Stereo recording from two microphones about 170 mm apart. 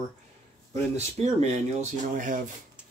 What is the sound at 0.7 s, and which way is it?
Speech, 40° right (ahead or behind).